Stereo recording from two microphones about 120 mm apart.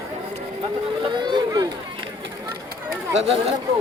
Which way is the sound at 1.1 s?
40° right (ahead or behind).